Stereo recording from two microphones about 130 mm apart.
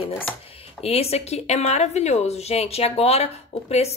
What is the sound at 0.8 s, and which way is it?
Speech, 50° left (ahead or behind).